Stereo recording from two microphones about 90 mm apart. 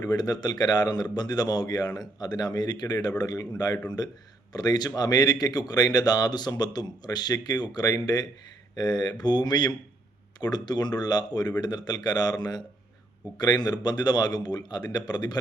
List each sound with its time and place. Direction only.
0.0 s speech: 45° left (ahead or behind)